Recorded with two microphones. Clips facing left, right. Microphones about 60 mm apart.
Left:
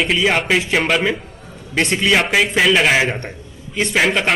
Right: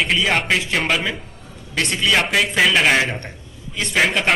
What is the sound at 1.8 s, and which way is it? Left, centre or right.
Speech, centre.